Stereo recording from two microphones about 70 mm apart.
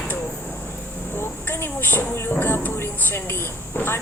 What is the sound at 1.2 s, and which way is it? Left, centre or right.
Speech, left.